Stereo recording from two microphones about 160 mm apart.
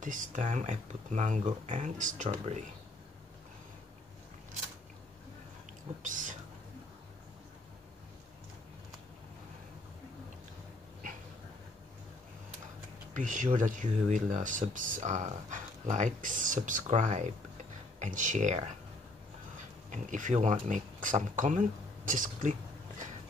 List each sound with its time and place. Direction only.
0.0 s speech: 55° right (ahead or behind)
6.0 s speech: 55° right (ahead or behind)
13.1 s speech: 55° right (ahead or behind)
19.9 s speech: 50° right (ahead or behind)